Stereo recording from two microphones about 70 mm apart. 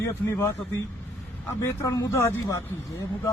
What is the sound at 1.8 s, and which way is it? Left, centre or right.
Speech, left.